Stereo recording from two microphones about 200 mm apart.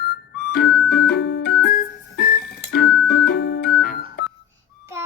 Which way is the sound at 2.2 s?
50° left (ahead or behind).